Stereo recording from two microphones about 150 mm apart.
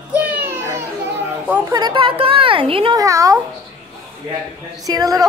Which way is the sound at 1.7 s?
30° right (ahead or behind).